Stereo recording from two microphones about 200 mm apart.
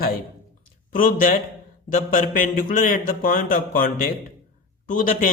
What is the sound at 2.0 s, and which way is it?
Speech, 40° left (ahead or behind).